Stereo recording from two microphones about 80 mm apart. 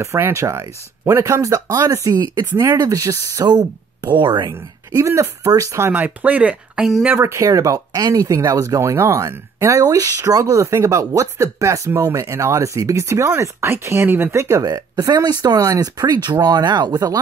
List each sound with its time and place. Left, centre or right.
0.0 s speech: right
4.2 s speech: right
4.9 s speech: right
5.9 s speech: right
6.7 s speech: centre
7.2 s speech: right
14.6 s speech: right